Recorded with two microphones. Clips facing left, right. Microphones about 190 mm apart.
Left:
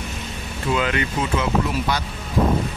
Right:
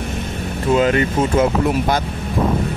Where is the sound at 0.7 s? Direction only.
40° right (ahead or behind).